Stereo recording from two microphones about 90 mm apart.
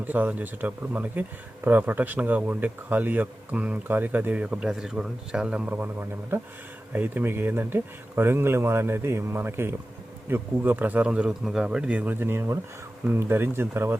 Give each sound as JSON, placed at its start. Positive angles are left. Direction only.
{"t": 0.0, "sound": "speech", "side_deg": -20}
{"t": 12.2, "sound": "speech", "side_deg": -25}